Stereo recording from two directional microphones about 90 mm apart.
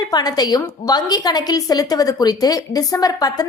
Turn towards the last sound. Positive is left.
turn(degrees=45)  # may be behind; listen again after turning